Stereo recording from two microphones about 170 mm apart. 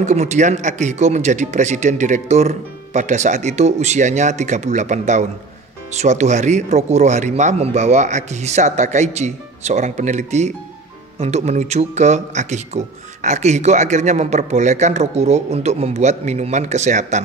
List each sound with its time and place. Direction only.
0.0 s speech: 40° right (ahead or behind)